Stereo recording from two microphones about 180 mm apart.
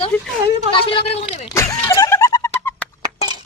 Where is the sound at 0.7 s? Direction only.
30° left (ahead or behind).